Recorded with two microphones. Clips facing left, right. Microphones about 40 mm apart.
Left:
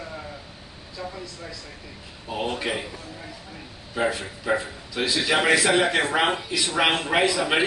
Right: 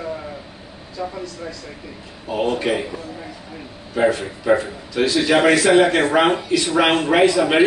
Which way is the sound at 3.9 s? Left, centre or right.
Centre.